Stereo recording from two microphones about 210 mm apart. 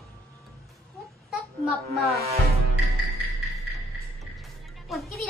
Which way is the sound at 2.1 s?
30° right (ahead or behind).